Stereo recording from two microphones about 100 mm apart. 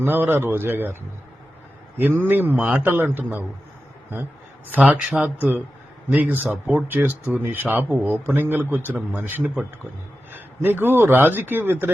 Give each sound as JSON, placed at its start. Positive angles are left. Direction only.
{"t": 0.0, "sound": "speech", "side_deg": -20}
{"t": 2.0, "sound": "speech", "side_deg": -20}
{"t": 4.7, "sound": "speech", "side_deg": -15}